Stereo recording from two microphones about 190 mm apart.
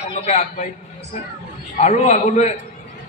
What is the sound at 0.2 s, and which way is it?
Speech, 35° left (ahead or behind).